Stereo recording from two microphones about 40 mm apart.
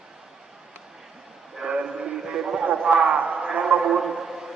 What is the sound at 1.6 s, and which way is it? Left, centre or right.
Radio, right.